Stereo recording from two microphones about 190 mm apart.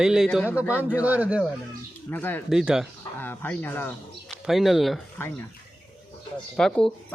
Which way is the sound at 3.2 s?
10° left (ahead or behind).